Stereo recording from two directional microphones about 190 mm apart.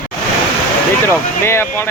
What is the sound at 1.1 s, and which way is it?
Speech, 10° left (ahead or behind).